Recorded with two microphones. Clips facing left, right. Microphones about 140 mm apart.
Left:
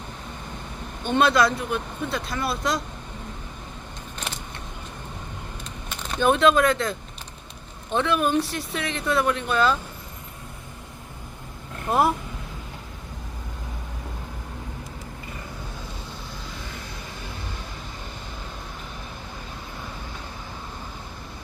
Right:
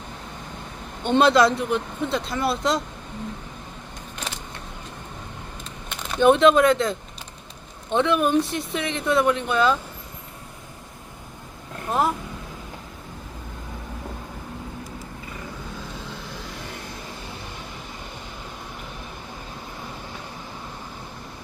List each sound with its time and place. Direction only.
1.0 s speech: 25° right (ahead or behind)
6.1 s speech: 20° right (ahead or behind)
11.9 s speech: 10° left (ahead or behind)